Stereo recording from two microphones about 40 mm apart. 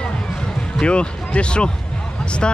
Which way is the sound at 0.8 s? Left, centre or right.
Left.